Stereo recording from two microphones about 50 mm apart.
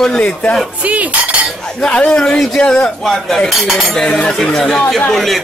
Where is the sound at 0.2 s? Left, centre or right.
Left.